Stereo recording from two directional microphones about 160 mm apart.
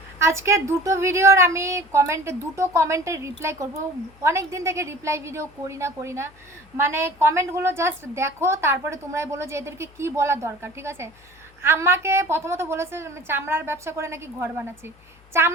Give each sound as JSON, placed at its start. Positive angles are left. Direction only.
{"t": 0.2, "sound": "a woman's voice", "side_deg": -15}